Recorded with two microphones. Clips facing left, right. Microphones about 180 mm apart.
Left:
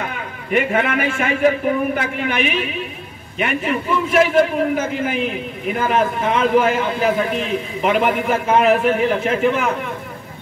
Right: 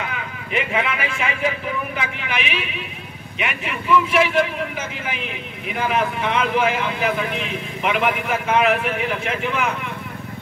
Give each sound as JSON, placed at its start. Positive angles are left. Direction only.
{"t": 0.5, "sound": "a man's voice", "side_deg": 50}